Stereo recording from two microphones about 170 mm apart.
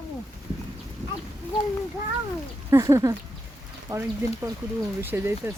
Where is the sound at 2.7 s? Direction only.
20° right (ahead or behind).